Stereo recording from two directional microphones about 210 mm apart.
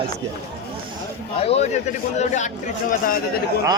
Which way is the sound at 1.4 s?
30° left (ahead or behind).